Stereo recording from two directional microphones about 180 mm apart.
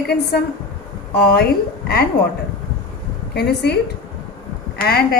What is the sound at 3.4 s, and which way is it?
Speech, 65° left (ahead or behind).